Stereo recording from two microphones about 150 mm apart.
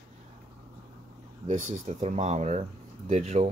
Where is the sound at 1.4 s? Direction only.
50° right (ahead or behind).